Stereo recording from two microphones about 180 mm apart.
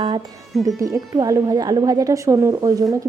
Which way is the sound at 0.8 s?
20° right (ahead or behind).